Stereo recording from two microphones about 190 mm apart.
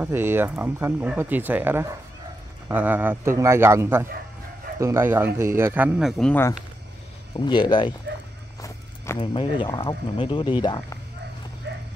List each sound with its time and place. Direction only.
0.0 s speech: 10° right (ahead or behind)
7.3 s speech: 25° left (ahead or behind)
8.5 s walk: 15° left (ahead or behind)
9.2 s speech: 25° left (ahead or behind)
11.7 s bow-wow: 60° right (ahead or behind)